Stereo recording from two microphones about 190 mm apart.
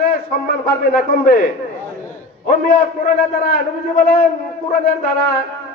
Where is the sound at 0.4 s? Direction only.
50° left (ahead or behind).